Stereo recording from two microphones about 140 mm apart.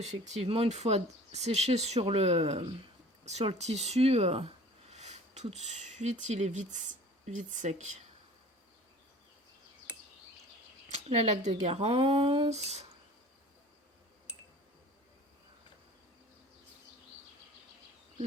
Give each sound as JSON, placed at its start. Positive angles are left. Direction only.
{"t": 0.0, "sound": "speech", "side_deg": -55}
{"t": 10.8, "sound": "speech", "side_deg": -50}